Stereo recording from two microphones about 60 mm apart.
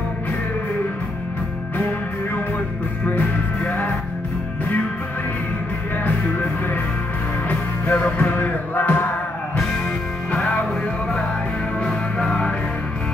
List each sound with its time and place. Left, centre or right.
3.1 s music: left
7.4 s music: left
11.8 s music: centre